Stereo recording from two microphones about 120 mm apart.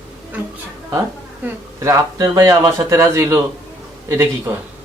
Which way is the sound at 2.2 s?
25° right (ahead or behind).